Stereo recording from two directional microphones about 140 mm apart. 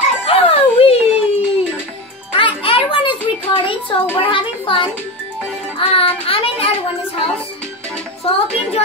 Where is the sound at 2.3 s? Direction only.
40° left (ahead or behind).